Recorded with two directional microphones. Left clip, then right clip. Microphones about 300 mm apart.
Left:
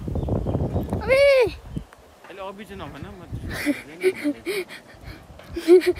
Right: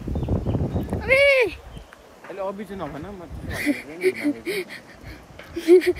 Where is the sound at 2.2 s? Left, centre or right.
Centre.